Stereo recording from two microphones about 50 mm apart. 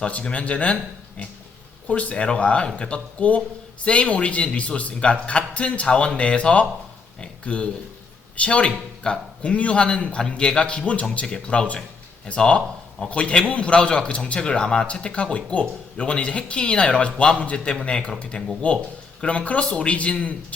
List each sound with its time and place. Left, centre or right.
0.0 s speech: left